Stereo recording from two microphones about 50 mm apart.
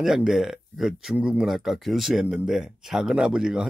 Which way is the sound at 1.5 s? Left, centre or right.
Centre.